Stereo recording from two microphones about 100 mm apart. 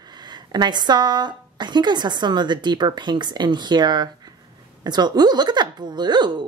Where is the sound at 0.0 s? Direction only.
45° right (ahead or behind).